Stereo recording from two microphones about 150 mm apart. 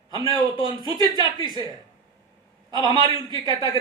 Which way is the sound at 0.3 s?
30° left (ahead or behind).